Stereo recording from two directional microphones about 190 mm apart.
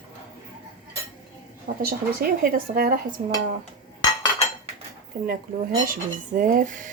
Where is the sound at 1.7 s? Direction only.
45° right (ahead or behind).